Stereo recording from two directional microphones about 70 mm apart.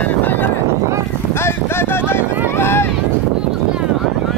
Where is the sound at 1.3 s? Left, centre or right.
Left.